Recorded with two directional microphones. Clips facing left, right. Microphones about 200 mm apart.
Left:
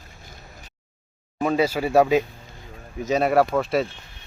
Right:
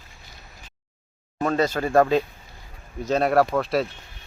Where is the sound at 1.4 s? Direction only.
10° left (ahead or behind).